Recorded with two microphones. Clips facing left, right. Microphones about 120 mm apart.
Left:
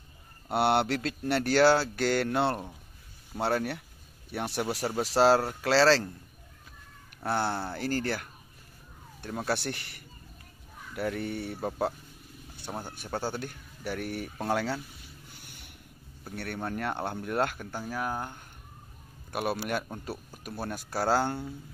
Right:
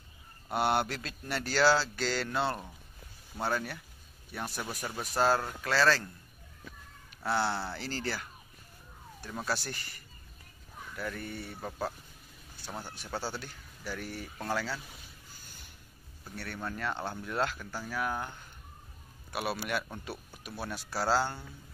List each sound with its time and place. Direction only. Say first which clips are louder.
0.5 s speech: left 4 dB; 65° left (ahead or behind); by 6.1 s 80° left
7.2 s speech: left 1 dB; 50° left (ahead or behind)
9.5 s speech: left 4 dB; 65° left (ahead or behind)
12.9 s speech: left 4 dB; 50° left (ahead or behind)
15.2 s a sound: left 3 dB; 65° left (ahead or behind)
16.6 s speech: left 3 dB; 60° left (ahead or behind)
17.6 s speech: left 3 dB; 20° left (ahead or behind)
17.9 s speech: left 1 dB; 35° left (ahead or behind)
19.3 s speech: left 3 dB; 45° left (ahead or behind)